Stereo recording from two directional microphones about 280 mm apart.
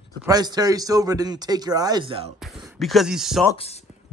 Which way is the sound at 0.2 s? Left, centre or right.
Centre.